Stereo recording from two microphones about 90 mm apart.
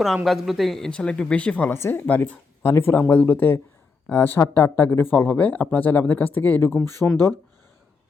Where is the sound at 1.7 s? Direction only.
25° left (ahead or behind).